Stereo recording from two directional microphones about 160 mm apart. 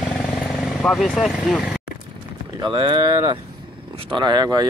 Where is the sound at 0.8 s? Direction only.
5° left (ahead or behind).